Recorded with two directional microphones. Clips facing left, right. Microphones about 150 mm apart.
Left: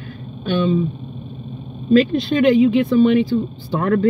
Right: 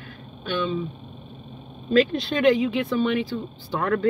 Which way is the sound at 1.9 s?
20° left (ahead or behind).